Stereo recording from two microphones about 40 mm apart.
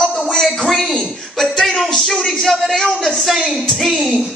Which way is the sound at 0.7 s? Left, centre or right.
Centre.